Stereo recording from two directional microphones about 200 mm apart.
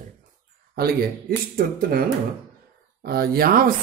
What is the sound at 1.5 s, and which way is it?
Speech, 45° right (ahead or behind).